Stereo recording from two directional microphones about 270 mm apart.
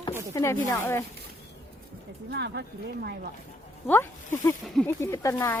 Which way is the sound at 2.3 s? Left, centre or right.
Right.